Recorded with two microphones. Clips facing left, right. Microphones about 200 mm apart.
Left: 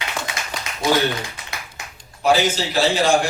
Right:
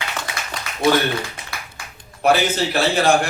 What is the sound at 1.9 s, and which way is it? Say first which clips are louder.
A man's voice: right 1 dB; 60° right (ahead or behind).